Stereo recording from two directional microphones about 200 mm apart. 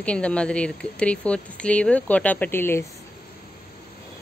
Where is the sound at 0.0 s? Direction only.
5° left (ahead or behind).